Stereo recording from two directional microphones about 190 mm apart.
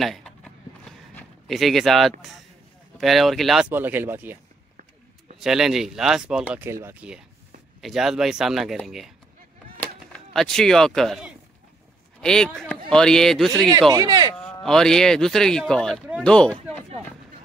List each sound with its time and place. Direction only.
0.0 s a sound: centre (ahead or behind)
3.0 s speech: centre (ahead or behind)
5.4 s speech: 5° right (ahead or behind)
10.1 s speech: centre (ahead or behind)
13.9 s speech: 20° right (ahead or behind)
14.3 s speech: 5° left (ahead or behind)